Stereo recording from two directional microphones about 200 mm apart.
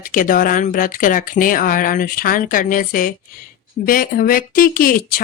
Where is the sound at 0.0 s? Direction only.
45° left (ahead or behind).